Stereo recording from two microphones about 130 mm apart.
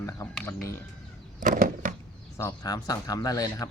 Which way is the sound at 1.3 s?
90° right.